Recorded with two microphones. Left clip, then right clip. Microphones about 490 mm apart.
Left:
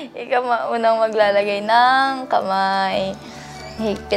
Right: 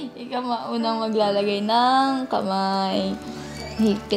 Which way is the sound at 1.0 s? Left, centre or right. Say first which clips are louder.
Left 5 dB; left.